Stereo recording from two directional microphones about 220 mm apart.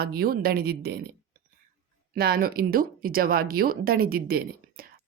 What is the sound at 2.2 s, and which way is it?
A woman's voice, 45° right (ahead or behind).